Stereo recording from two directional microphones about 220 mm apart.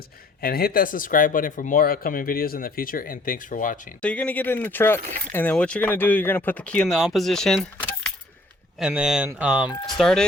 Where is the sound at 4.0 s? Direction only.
5° left (ahead or behind).